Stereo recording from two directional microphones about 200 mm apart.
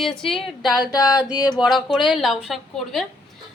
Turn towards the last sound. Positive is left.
turn(degrees=0)  # may be behind; listen again after turning